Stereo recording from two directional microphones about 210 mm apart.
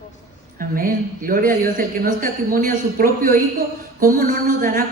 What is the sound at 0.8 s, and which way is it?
Speech, 40° right (ahead or behind).